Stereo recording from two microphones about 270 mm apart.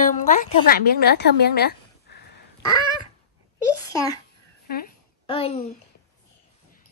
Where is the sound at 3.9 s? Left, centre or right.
Centre.